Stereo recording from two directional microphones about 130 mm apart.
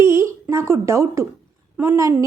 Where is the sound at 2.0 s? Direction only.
25° right (ahead or behind).